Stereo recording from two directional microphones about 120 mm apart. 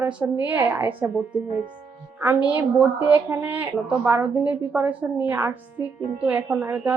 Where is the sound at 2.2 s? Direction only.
15° right (ahead or behind).